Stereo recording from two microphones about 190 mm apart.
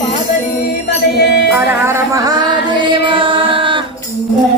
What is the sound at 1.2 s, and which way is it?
Music, 60° left (ahead or behind).